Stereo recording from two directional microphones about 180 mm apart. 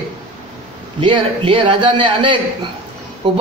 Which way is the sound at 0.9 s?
30° right (ahead or behind).